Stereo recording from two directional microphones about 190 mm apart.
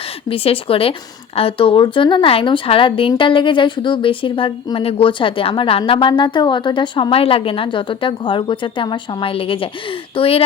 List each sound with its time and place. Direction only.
0.3 s speech: 30° left (ahead or behind)